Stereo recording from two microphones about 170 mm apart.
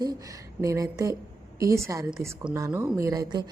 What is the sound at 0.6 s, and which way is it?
A woman's voice, 20° right (ahead or behind).